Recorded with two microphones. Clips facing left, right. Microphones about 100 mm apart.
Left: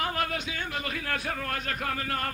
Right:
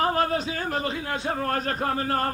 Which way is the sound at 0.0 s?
35° right (ahead or behind).